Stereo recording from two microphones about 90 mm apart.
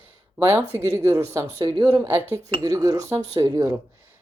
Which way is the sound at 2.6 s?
40° right (ahead or behind).